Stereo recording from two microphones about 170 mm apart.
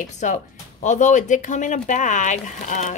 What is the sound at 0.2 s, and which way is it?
Speech, 45° left (ahead or behind).